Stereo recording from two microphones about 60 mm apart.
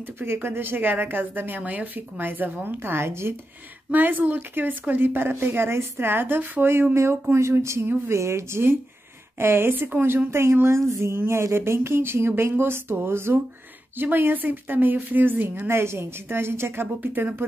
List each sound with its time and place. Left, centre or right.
0.0 s speech: right
2.8 s speech: right
3.9 s speech: right